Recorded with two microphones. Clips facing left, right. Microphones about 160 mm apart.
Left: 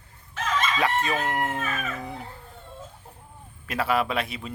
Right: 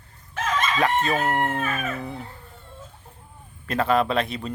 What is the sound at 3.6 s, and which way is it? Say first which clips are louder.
Speech: right 4 dB; 10° left (ahead or behind).